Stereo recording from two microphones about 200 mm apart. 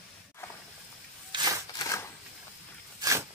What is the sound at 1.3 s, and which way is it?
Rub, 20° right (ahead or behind).